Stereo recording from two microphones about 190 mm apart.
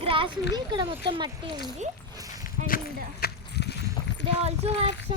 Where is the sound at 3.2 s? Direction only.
60° left (ahead or behind).